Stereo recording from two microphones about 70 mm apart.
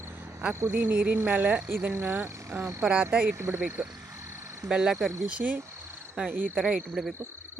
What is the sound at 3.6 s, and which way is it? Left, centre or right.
Speech, right.